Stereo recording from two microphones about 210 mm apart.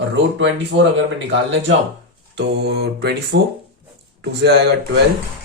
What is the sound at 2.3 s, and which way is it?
Speech, 55° right (ahead or behind).